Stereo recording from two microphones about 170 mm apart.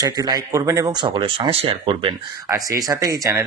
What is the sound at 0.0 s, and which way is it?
Speech, 20° right (ahead or behind).